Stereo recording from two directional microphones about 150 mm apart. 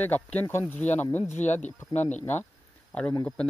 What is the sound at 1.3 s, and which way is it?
Speech, 50° left (ahead or behind).